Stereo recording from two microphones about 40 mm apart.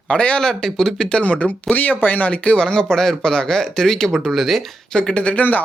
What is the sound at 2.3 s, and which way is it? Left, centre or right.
Speech, left.